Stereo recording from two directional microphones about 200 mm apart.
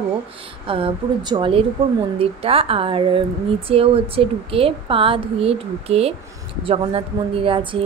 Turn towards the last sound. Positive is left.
turn(degrees=-25)  # may be behind; listen again after turning